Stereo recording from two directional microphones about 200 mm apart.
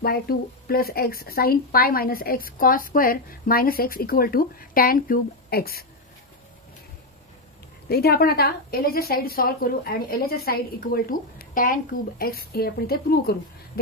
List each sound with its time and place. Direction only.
0.0 s speech: 50° left (ahead or behind)
7.9 s speech: 50° left (ahead or behind)